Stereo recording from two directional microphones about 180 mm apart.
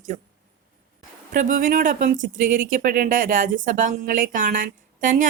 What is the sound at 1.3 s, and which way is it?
Speech, 50° right (ahead or behind).